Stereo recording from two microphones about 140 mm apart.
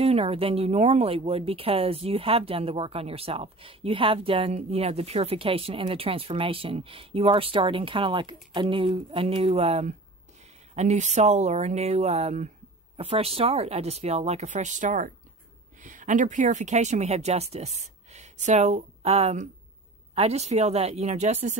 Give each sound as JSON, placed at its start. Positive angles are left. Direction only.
{"t": 0.0, "sound": "speech", "side_deg": -45}